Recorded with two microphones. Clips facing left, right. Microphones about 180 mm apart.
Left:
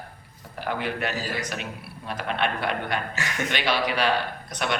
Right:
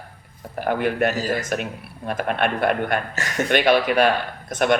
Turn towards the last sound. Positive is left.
turn(degrees=-50)  # may be behind; listen again after turning